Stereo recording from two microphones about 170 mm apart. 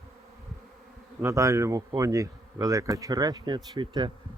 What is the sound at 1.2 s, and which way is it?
Speech, 15° right (ahead or behind).